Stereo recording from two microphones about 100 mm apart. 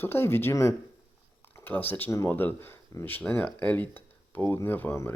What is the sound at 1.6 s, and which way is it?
Speech, 20° left (ahead or behind).